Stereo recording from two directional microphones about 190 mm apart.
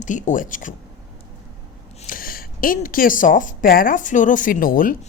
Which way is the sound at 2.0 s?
50° left (ahead or behind).